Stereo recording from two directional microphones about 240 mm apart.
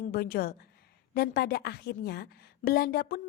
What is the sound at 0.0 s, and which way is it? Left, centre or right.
A woman's voice, left.